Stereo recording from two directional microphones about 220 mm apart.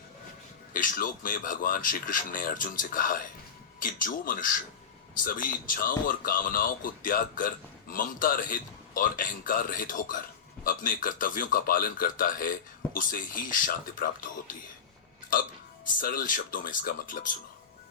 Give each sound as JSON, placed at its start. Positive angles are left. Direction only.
{"t": 0.7, "sound": "a man's voice", "side_deg": 40}
{"t": 16.0, "sound": "a man's voice", "side_deg": 40}